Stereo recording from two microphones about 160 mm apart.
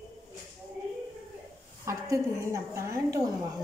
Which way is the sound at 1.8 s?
20° right (ahead or behind).